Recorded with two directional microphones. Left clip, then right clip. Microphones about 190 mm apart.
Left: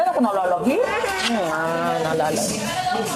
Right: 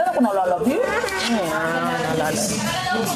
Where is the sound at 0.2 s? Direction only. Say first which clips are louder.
Right 1 dB; 20° left (ahead or behind).